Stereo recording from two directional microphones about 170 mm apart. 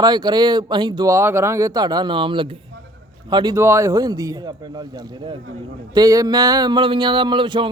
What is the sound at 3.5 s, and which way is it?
Speech, 15° right (ahead or behind).